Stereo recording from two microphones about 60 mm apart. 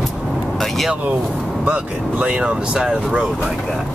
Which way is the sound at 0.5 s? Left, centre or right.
Centre.